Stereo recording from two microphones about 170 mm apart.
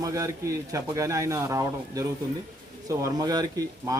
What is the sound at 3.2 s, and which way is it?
Speech, 20° right (ahead or behind).